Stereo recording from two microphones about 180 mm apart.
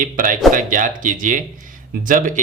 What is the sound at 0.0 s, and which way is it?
Speech, 50° right (ahead or behind).